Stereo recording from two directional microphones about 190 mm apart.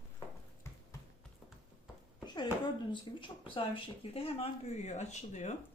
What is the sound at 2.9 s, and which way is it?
Speech, 25° left (ahead or behind).